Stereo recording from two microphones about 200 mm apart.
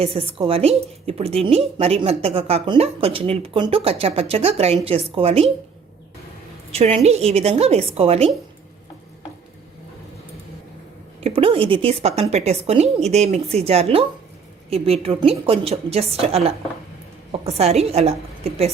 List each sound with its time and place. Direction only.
0.0 s a woman's voice: 30° right (ahead or behind)
6.7 s a woman's voice: 30° right (ahead or behind)
11.2 s a woman's voice: 30° right (ahead or behind)